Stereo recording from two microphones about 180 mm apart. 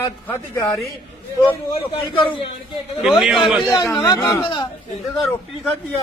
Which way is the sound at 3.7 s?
15° left (ahead or behind).